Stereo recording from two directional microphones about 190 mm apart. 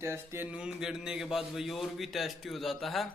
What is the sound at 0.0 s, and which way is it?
A man's voice, 15° right (ahead or behind).